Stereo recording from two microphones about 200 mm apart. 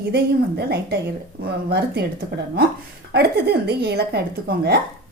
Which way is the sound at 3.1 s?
55° right (ahead or behind).